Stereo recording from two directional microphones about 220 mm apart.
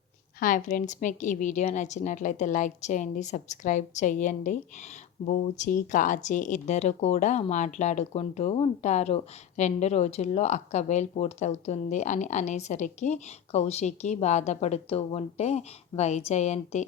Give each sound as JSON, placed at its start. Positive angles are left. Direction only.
{"t": 0.3, "sound": "speech", "side_deg": 35}